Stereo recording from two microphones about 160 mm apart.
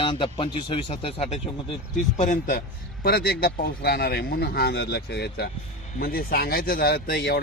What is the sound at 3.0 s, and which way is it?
A man's voice, 80° left.